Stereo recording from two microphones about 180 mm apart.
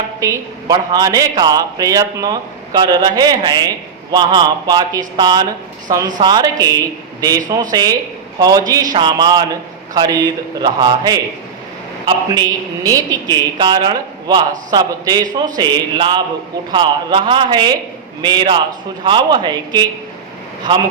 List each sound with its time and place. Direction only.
0.2 s a man's voice: 20° right (ahead or behind)